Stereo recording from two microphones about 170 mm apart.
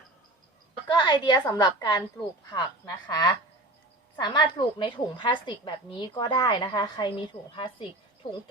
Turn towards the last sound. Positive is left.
turn(degrees=30)  # may be behind; listen again after turning